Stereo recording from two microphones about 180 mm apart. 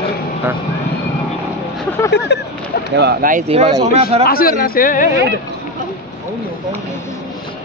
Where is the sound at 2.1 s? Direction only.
70° left (ahead or behind).